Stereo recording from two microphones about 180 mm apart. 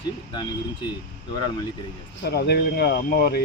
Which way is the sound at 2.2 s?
70° left (ahead or behind).